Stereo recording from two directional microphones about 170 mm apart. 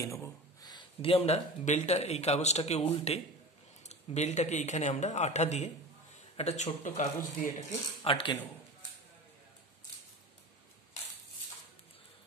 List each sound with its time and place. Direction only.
0.0 s speech: 20° left (ahead or behind); by 7.2 s 45° left (ahead or behind)
8.0 s speech: 30° left (ahead or behind)